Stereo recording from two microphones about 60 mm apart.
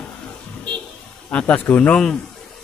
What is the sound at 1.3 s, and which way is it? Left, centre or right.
Speech, left.